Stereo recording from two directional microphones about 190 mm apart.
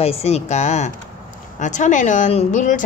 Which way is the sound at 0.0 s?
35° left (ahead or behind).